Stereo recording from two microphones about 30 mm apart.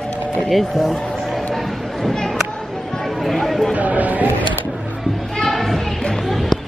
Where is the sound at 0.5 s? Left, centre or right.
Centre.